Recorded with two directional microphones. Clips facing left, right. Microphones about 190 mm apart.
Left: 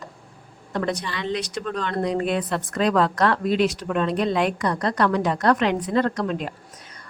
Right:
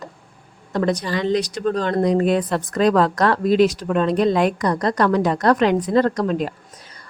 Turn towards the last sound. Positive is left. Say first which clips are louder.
# right 5 dB
turn(degrees=-40)  # may be behind; listen again after turning